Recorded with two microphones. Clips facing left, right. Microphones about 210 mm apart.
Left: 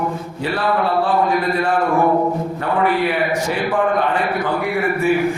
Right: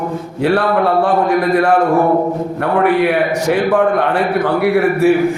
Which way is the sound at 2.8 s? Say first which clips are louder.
Right 5 dB; 65° right (ahead or behind).